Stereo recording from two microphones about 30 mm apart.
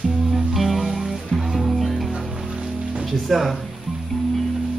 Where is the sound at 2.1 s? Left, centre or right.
Right.